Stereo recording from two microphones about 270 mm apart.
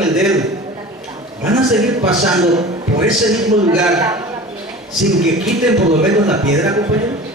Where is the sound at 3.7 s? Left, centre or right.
Centre.